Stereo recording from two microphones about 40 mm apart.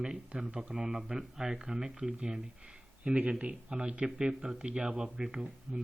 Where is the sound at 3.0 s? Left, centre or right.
Right.